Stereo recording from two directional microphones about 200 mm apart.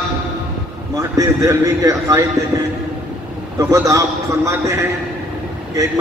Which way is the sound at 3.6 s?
15° right (ahead or behind).